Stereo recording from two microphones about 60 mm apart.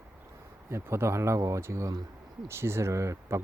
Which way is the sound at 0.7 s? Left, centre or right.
Right.